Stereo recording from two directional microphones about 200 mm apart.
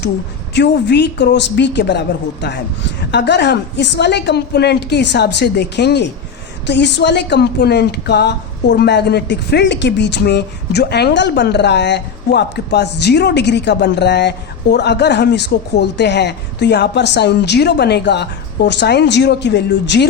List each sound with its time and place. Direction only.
0.5 s a woman's voice: 60° left (ahead or behind)